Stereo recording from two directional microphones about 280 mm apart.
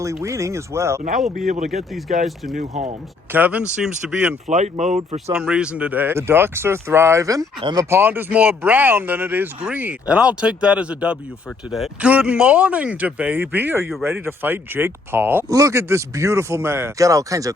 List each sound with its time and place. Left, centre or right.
0.0 s speech: centre
1.5 s speech: right
1.7 s speech: centre
2.6 s speech: right
3.3 s speech: centre
4.4 s speech: right
5.3 s speech: centre